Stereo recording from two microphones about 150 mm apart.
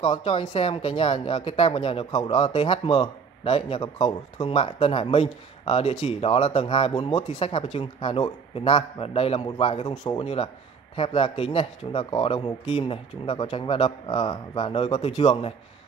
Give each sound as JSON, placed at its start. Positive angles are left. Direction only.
{"t": 0.1, "sound": "speech", "side_deg": 40}